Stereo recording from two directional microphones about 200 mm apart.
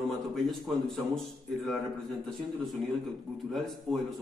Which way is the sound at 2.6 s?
Centre (ahead or behind).